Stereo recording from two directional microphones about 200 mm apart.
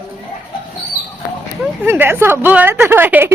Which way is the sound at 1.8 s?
10° right (ahead or behind).